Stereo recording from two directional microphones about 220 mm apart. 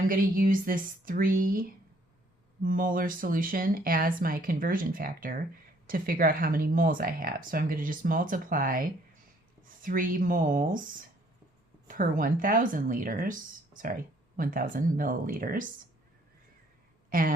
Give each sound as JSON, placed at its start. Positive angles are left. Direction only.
{"t": 0.1, "sound": "speech", "side_deg": -40}
{"t": 2.6, "sound": "speech", "side_deg": -40}
{"t": 11.9, "sound": "speech", "side_deg": -40}
{"t": 17.1, "sound": "a woman's voice", "side_deg": -40}